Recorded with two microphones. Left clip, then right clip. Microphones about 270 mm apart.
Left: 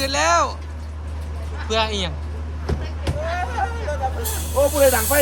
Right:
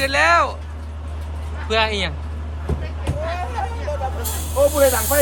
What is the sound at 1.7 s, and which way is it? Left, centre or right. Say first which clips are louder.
Speech: right 2 dB; centre.